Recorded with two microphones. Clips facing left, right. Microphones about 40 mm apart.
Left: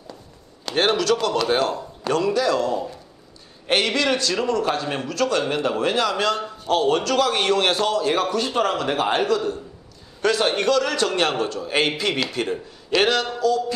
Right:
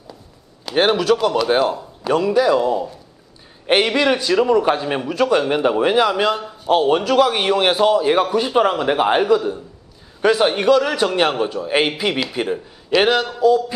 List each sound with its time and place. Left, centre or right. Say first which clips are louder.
0.7 s a man's voice: right 4 dB; centre